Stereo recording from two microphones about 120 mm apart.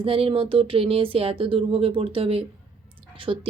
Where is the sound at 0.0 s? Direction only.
50° right (ahead or behind).